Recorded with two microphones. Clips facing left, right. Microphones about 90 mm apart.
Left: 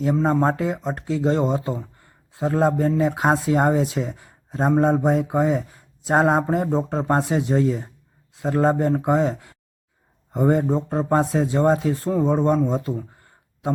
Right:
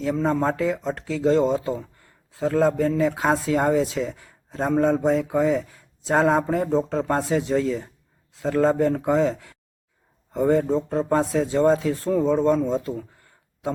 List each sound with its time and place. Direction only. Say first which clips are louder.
0.4 s speech: left 1 dB; 30° left (ahead or behind)